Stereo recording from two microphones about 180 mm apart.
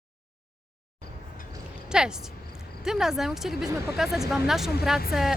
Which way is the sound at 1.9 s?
5° right (ahead or behind).